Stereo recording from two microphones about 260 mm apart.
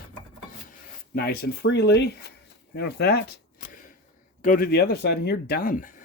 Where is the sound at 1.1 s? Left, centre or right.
Left.